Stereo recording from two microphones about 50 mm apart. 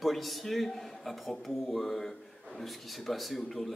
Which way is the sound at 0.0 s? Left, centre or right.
Centre.